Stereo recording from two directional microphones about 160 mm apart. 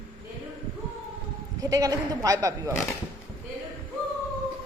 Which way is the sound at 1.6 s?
20° right (ahead or behind).